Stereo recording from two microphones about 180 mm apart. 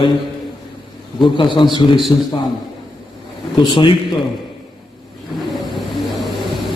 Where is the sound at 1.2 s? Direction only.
25° left (ahead or behind).